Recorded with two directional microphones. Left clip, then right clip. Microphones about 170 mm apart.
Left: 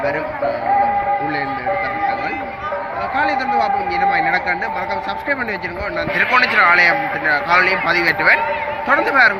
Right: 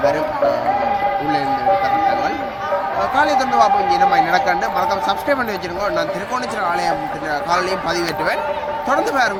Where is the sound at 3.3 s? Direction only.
25° right (ahead or behind).